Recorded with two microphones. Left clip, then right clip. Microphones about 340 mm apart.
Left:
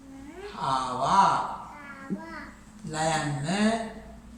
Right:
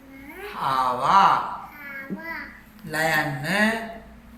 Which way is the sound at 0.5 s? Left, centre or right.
Centre.